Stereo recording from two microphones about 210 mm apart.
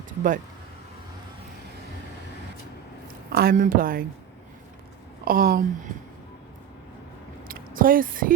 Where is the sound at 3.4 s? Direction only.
40° right (ahead or behind).